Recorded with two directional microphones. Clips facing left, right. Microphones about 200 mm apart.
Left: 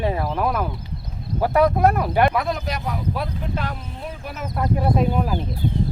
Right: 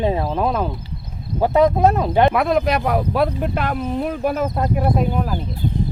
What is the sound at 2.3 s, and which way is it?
Speech, 65° right (ahead or behind).